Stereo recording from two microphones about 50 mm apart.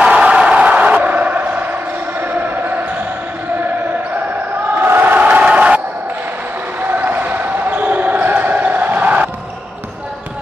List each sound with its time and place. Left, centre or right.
0.1 s a sound: right
2.4 s basketball bounce: right
4.7 s crowd: right
6.8 s basketball bounce: right